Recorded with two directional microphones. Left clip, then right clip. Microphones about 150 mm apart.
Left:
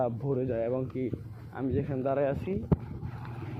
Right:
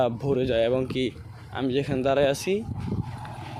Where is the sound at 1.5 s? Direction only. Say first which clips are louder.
Right 6 dB; 65° right (ahead or behind); by 2.5 s 90° right.